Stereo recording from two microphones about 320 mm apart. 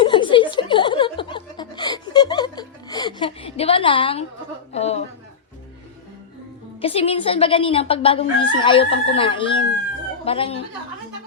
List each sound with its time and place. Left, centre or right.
0.0 s chuckle: centre
4.7 s a sound: centre
6.8 s speech: centre